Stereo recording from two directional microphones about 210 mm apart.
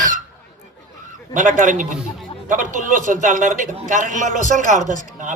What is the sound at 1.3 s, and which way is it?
A man's voice, 35° right (ahead or behind).